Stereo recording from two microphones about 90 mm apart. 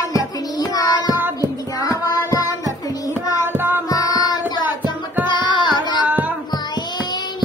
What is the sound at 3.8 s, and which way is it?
Child singing, 45° left (ahead or behind).